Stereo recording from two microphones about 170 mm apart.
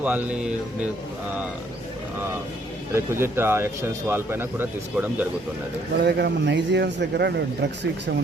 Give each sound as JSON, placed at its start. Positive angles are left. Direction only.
{"t": 0.0, "sound": "speech", "side_deg": -10}
{"t": 2.9, "sound": "speech", "side_deg": -15}
{"t": 6.0, "sound": "speech", "side_deg": -80}